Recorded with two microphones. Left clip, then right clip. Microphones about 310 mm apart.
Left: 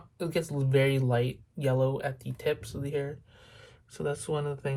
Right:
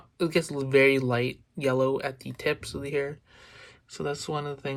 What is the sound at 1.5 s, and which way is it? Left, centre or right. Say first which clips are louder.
Speech: right 3 dB; right.